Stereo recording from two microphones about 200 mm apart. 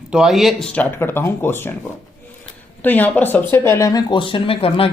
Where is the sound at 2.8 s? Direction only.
10° left (ahead or behind).